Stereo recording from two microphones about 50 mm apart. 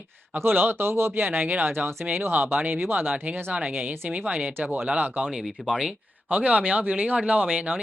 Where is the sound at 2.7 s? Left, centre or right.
Right.